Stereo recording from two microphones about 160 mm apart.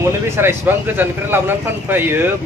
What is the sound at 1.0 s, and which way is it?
Speech, 15° right (ahead or behind).